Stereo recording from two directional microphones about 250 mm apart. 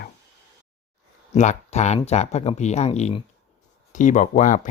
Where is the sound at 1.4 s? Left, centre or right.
Left.